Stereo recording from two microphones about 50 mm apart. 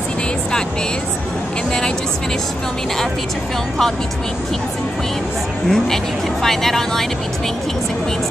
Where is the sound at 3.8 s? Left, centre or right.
Centre.